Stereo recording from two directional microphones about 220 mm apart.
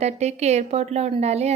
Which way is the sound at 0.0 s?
30° right (ahead or behind).